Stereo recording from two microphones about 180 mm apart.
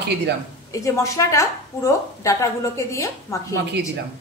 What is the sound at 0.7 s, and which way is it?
A woman's voice, 15° left (ahead or behind).